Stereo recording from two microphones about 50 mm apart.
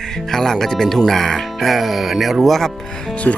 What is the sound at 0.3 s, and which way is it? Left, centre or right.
Speech, centre.